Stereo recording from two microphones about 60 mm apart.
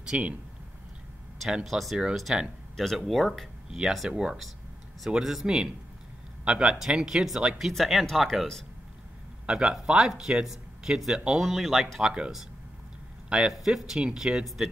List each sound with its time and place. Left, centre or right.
0.0 s speech: centre
1.5 s speech: centre
9.5 s speech: centre
12.1 s speech: centre
13.5 s speech: centre